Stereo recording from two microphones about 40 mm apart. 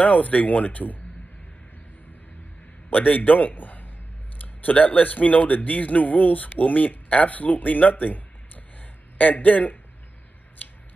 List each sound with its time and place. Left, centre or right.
0.0 s speech: left
2.9 s a man's voice: left
9.2 s speech: left